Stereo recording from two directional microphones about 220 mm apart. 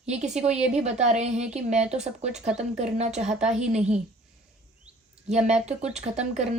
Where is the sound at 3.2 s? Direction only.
30° right (ahead or behind).